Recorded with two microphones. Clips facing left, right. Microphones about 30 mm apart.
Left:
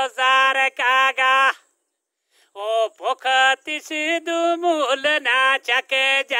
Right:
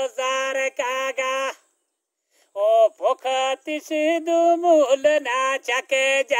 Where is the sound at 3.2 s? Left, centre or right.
Left.